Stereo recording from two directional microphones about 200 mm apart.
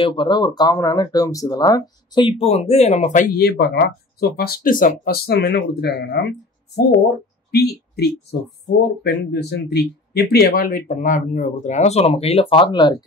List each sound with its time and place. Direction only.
0.0 s speech: 25° left (ahead or behind); by 6.2 s 55° left (ahead or behind)
7.5 s speech: 55° left (ahead or behind); by 12.9 s 25° left (ahead or behind)